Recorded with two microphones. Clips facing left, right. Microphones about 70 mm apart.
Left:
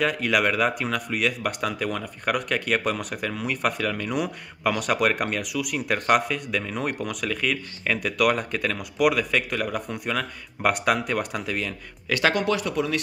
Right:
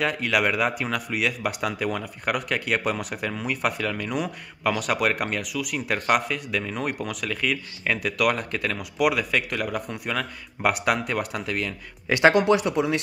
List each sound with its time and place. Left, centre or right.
0.0 s speech: centre
12.1 s speech: right